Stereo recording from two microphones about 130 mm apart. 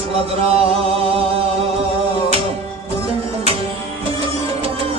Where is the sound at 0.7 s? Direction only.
45° right (ahead or behind).